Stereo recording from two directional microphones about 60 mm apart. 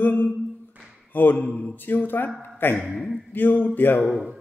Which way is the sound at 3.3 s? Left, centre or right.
Left.